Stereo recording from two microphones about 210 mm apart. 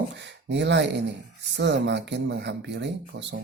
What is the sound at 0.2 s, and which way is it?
Speech, 55° right (ahead or behind).